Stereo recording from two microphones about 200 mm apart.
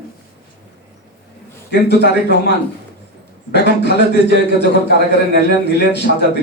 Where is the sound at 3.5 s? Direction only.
60° left (ahead or behind).